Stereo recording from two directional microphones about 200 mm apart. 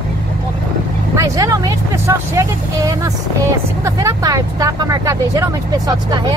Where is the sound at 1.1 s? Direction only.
15° right (ahead or behind).